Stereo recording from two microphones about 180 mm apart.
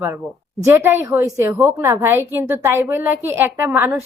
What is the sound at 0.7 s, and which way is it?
A woman's voice, 15° right (ahead or behind).